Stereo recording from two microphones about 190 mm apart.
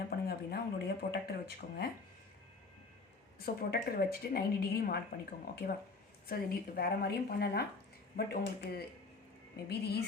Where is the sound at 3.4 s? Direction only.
55° left (ahead or behind).